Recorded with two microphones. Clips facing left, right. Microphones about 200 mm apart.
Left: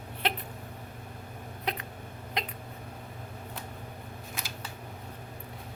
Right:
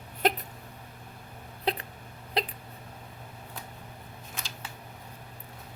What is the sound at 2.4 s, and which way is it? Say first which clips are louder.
Hiccup: right 5 dB; 35° right (ahead or behind).